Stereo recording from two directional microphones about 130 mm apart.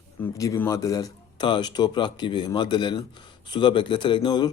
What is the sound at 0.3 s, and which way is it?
Speech, 25° left (ahead or behind).